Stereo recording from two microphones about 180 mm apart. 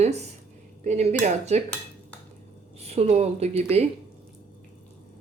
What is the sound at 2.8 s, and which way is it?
A woman's voice, 35° right (ahead or behind).